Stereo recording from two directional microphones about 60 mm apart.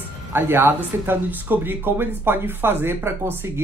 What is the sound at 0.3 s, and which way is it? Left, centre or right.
A woman's voice, right.